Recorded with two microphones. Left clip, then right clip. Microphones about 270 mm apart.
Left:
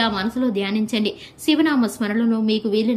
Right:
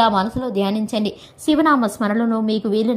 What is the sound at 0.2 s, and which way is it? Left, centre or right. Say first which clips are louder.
A woman's voice: right 2 dB; centre.